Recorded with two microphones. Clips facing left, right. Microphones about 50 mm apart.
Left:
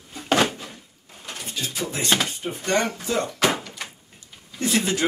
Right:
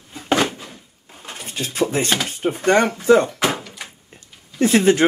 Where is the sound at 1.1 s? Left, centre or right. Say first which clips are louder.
Right 2 dB; right.